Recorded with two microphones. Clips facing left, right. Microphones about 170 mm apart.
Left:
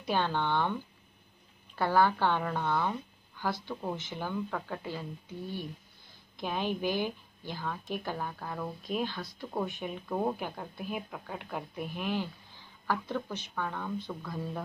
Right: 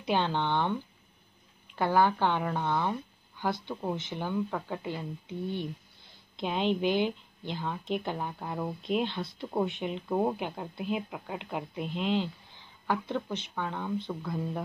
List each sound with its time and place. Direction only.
0.0 s speech: 15° right (ahead or behind)
1.8 s speech: 15° right (ahead or behind)
6.3 s a woman's voice: 20° right (ahead or behind)